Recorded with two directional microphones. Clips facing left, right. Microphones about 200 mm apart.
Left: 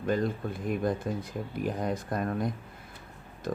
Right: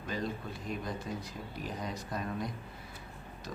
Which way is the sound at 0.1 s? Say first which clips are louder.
Left 8 dB; 50° left (ahead or behind).